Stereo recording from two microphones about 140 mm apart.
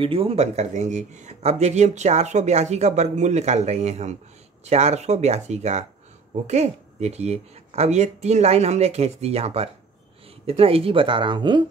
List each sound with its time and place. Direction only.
0.0 s speech: 40° right (ahead or behind)